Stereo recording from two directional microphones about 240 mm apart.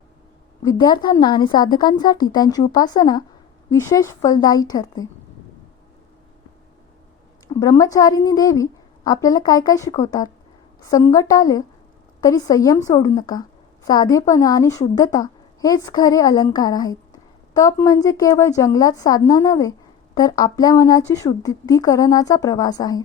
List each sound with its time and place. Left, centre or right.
0.6 s a woman's voice: centre
7.4 s a woman's voice: centre